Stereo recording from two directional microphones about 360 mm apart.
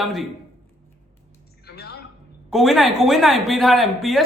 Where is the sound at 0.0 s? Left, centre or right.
Centre.